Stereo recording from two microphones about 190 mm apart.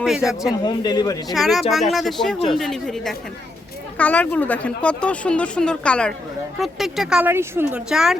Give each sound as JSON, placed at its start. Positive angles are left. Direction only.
{"t": 0.0, "sound": "speech", "side_deg": 0}
{"t": 0.6, "sound": "speech", "side_deg": 20}
{"t": 1.3, "sound": "speech", "side_deg": 0}